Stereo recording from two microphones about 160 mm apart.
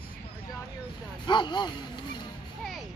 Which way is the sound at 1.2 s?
30° left (ahead or behind).